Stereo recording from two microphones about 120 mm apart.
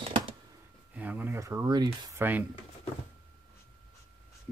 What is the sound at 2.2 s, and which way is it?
Speech, 15° right (ahead or behind).